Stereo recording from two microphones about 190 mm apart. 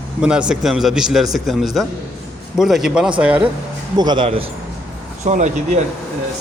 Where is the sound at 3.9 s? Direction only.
20° right (ahead or behind).